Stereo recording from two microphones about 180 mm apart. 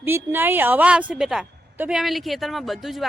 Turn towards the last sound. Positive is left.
turn(degrees=0)  # may be behind; listen again after turning